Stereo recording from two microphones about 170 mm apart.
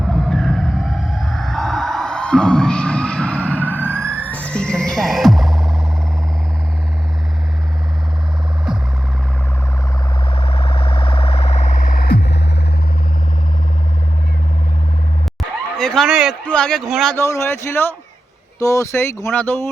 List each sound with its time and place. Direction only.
0.1 s a sound: centre (ahead or behind)
3.6 s emergency vehicle: 10° right (ahead or behind)
3.9 s music: 10° left (ahead or behind)
10.3 s siren: 35° left (ahead or behind); by 12.4 s 70° left (ahead or behind)
15.8 s a man's voice: 5° left (ahead or behind)
17.2 s speech: 15° left (ahead or behind)